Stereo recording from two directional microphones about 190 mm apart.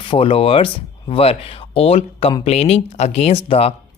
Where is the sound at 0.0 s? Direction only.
30° left (ahead or behind).